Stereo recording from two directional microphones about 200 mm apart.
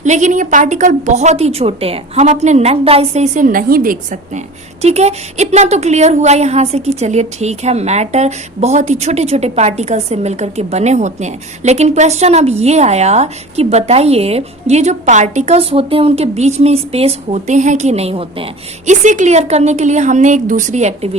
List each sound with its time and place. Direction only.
0.0 s a woman's voice: 35° right (ahead or behind)